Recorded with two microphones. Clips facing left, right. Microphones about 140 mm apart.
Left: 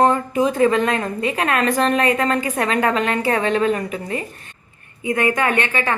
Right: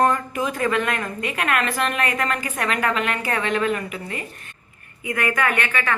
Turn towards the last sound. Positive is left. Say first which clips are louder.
# left 3 dB
turn(degrees=30)  # may be behind; listen again after turning